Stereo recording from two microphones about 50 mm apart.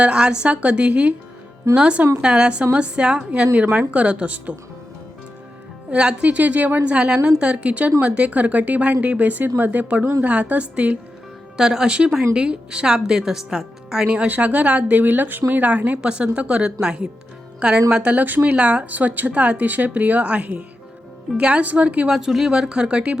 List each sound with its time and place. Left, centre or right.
0.0 s a woman's voice: centre
5.9 s a woman's voice: right
6.9 s a woman's voice: centre
11.5 s speech: centre
14.3 s speech: right
16.0 s a woman's voice: centre; by 18.4 s right
18.4 s a woman's voice: right
18.9 s a woman's voice: right
22.1 s speech: centre